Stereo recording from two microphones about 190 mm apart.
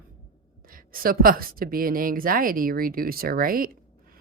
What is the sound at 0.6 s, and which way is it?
Speech, 50° right (ahead or behind).